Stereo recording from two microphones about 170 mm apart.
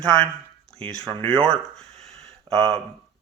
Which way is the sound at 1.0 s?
30° right (ahead or behind).